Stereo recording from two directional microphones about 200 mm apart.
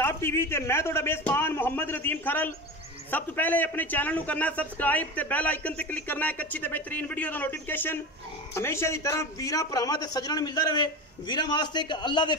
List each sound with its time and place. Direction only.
0.0 s a man's voice: 10° left (ahead or behind)